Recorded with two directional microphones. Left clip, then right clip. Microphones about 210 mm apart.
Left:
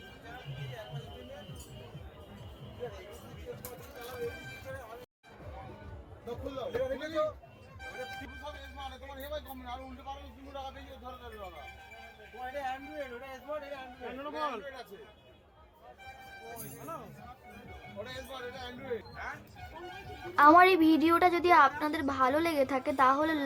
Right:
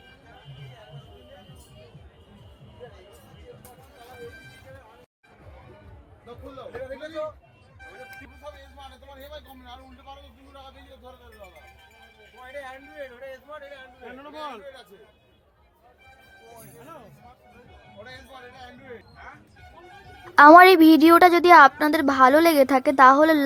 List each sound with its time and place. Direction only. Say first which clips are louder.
14.1 s speech: left 1 dB; 25° right (ahead or behind)
18.0 s a man's voice: even; 20° left (ahead or behind)
20.3 s a woman's voice: right 11 dB; 40° right (ahead or behind)